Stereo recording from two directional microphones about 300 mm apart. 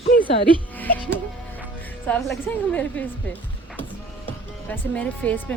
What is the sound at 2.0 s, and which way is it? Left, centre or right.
A woman's voice, centre.